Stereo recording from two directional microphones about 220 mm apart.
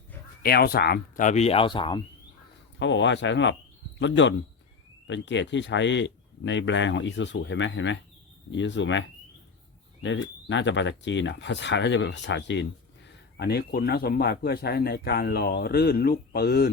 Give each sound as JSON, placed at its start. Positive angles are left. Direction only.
{"t": 0.4, "sound": "speech", "side_deg": 45}
{"t": 2.7, "sound": "speech", "side_deg": 55}